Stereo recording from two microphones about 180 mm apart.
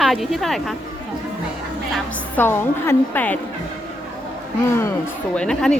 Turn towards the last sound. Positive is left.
turn(degrees=5)  # may be behind; listen again after turning